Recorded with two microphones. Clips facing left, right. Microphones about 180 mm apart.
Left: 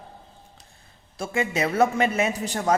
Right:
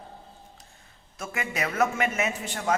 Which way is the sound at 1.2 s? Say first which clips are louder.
Left 6 dB; 30° left (ahead or behind).